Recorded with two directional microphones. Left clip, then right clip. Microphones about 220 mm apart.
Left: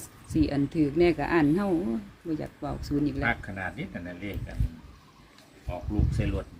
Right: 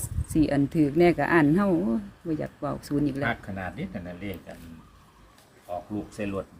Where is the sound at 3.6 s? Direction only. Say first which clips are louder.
Even; 40° right (ahead or behind).